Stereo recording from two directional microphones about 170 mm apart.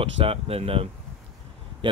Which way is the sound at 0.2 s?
35° right (ahead or behind).